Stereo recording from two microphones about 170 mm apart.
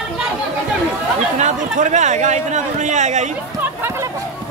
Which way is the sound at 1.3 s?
45° right (ahead or behind).